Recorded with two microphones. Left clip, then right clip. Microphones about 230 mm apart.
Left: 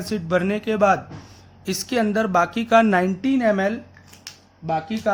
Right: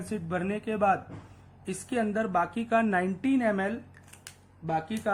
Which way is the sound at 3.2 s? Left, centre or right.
Left.